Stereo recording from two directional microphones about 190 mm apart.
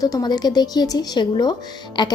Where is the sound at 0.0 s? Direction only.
20° left (ahead or behind).